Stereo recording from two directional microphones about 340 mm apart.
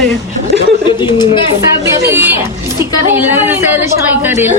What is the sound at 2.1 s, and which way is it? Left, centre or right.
A woman's voice, centre.